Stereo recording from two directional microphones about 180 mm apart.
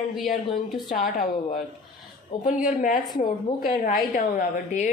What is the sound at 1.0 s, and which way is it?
A woman's voice, 50° left (ahead or behind).